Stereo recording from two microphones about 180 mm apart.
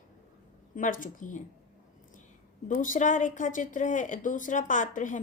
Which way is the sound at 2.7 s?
45° left (ahead or behind).